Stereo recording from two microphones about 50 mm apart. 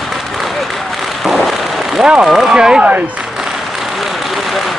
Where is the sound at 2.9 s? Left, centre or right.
Right.